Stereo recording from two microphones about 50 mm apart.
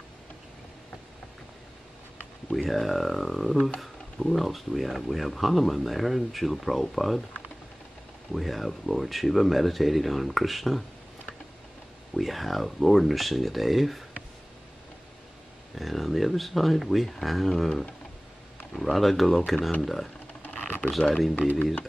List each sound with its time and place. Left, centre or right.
2.5 s speech: centre
8.3 s speech: centre
12.1 s speech: centre
15.7 s speech: centre
18.8 s speech: centre
20.4 s typing: left